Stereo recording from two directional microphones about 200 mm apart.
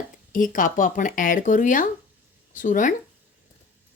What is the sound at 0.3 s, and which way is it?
Speech, 45° left (ahead or behind).